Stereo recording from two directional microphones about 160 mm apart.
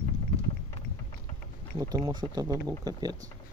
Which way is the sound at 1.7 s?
20° right (ahead or behind).